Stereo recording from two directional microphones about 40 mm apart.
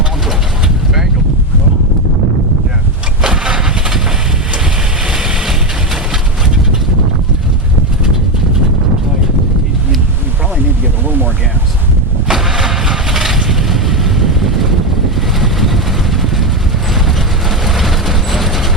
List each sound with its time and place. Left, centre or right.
3.2 s vehicle: centre
5.0 s vehicle: centre
12.3 s vehicle: centre